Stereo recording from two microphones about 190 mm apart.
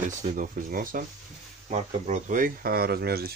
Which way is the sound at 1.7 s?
35° right (ahead or behind).